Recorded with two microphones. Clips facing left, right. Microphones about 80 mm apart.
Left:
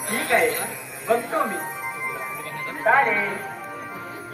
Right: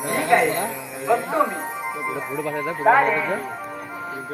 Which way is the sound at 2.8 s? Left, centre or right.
Centre.